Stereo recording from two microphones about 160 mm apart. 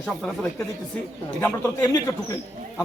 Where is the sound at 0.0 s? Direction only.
5° left (ahead or behind).